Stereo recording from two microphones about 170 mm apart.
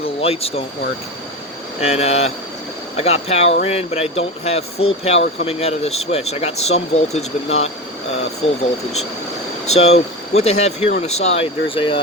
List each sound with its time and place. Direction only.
0.2 s speech: 35° left (ahead or behind)
1.8 s speech: 40° left (ahead or behind)
9.7 s speech: 40° left (ahead or behind)